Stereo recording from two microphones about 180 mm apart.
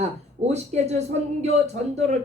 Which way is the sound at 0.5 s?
40° right (ahead or behind).